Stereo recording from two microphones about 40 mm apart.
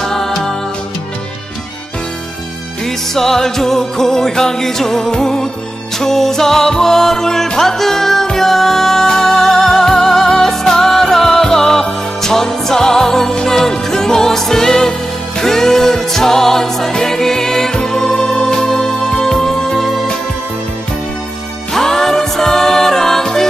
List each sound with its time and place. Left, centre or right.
0.0 s music: centre
3.2 s music: centre
21.7 s music: centre